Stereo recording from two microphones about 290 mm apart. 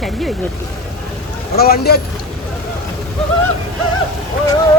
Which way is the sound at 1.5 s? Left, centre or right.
Left.